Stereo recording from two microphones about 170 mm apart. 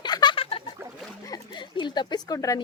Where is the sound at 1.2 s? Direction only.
25° left (ahead or behind).